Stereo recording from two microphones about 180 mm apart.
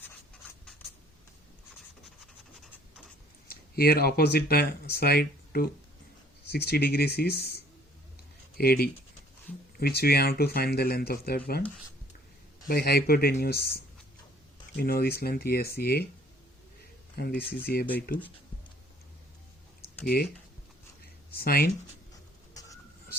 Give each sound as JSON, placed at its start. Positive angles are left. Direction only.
{"t": 2.2, "sound": "scratch", "side_deg": 0}
{"t": 3.5, "sound": "speech", "side_deg": 60}
{"t": 12.6, "sound": "speech", "side_deg": 60}
{"t": 17.2, "sound": "speech", "side_deg": 55}
{"t": 21.3, "sound": "speech", "side_deg": 55}